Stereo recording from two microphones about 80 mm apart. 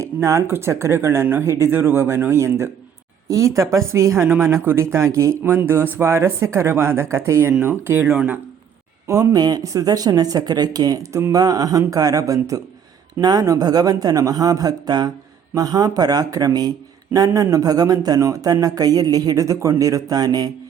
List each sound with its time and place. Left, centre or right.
0.0 s speech: right
5.4 s speech: right
8.1 s speech: centre
9.0 s speech: right
9.3 s speech: right